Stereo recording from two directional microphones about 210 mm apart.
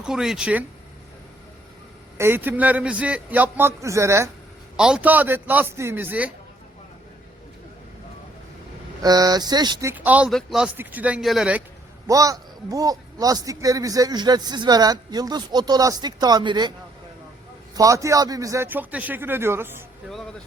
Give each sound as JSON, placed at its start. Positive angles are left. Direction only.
{"t": 0.0, "sound": "speech", "side_deg": 0}
{"t": 2.1, "sound": "a man's voice", "side_deg": -10}
{"t": 9.0, "sound": "a man's voice", "side_deg": -20}
{"t": 9.9, "sound": "speech", "side_deg": -5}
{"t": 12.0, "sound": "a man's voice", "side_deg": -15}
{"t": 17.7, "sound": "a man's voice", "side_deg": -15}